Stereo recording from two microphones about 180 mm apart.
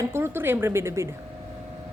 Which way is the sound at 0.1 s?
15° right (ahead or behind).